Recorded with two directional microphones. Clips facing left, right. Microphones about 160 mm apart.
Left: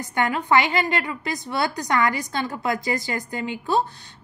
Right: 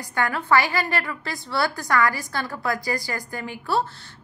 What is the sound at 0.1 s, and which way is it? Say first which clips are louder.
A woman's voice: left 1 dB; 20° left (ahead or behind).